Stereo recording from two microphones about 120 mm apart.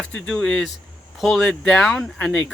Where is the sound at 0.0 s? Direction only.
10° left (ahead or behind).